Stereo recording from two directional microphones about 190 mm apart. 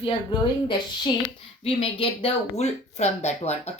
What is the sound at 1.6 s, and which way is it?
Speech, 30° left (ahead or behind).